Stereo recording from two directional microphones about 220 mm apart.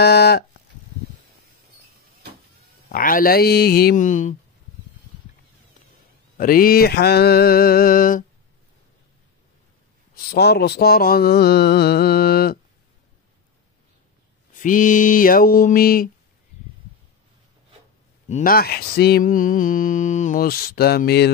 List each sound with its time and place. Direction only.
0.0 s a sound: 45° left (ahead or behind)
2.9 s speech: 40° left (ahead or behind)
6.3 s speech: 40° left (ahead or behind)
10.3 s speech: 45° left (ahead or behind)
14.6 s speech: 35° left (ahead or behind)
18.3 s speech: 40° left (ahead or behind)